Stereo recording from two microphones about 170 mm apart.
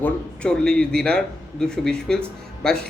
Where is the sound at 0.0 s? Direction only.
5° left (ahead or behind).